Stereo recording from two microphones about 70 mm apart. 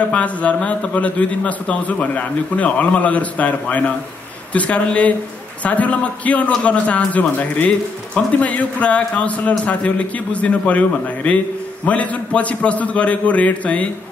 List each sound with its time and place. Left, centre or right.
0.1 s a man's voice: centre